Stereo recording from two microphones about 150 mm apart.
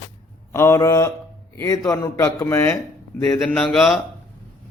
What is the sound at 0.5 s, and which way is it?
Mantra, 15° left (ahead or behind).